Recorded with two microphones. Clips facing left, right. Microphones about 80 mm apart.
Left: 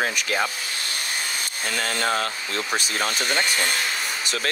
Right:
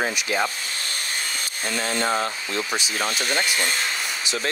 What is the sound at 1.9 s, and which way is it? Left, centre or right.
Speech, right.